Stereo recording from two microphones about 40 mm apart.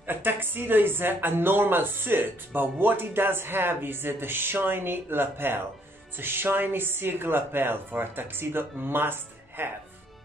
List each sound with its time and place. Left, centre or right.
0.0 s speech: right